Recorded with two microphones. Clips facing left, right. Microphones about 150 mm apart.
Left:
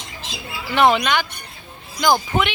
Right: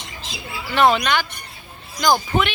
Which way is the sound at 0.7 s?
15° left (ahead or behind).